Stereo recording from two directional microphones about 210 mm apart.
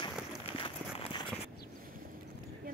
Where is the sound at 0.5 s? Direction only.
25° left (ahead or behind).